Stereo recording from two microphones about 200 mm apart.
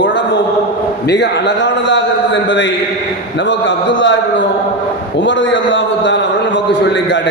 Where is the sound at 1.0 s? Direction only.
60° left (ahead or behind).